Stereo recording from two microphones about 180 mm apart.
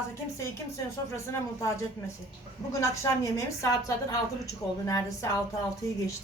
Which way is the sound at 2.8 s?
15° left (ahead or behind).